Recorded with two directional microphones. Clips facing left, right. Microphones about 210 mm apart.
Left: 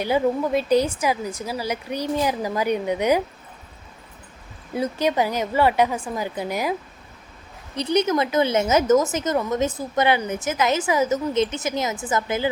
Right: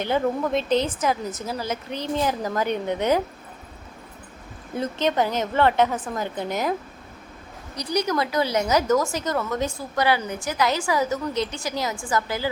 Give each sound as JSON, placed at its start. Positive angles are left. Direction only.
{"t": 0.0, "sound": "a woman's voice", "side_deg": 10}
{"t": 4.8, "sound": "a woman's voice", "side_deg": 10}
{"t": 7.8, "sound": "speech", "side_deg": 25}